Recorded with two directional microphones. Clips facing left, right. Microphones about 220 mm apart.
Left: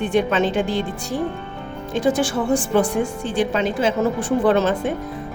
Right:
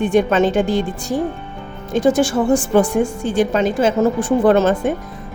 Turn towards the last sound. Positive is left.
turn(degrees=-45)  # may be behind; listen again after turning